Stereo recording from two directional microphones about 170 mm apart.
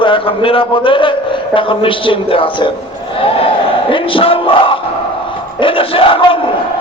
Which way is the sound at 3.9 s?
30° left (ahead or behind).